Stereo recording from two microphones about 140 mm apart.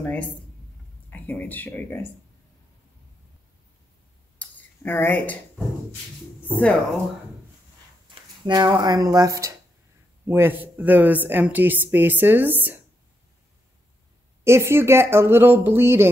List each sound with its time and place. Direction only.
1.1 s speech: 10° left (ahead or behind)
4.4 s a sound: 15° left (ahead or behind)
6.4 s speech: 10° left (ahead or behind)
8.1 s speech: 30° right (ahead or behind); by 12.8 s 15° right (ahead or behind)
14.4 s speech: 20° right (ahead or behind)